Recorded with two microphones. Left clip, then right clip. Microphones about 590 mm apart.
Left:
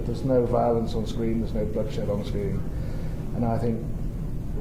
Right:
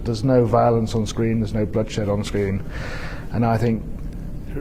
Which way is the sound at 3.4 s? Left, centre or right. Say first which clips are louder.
Right 7 dB; right.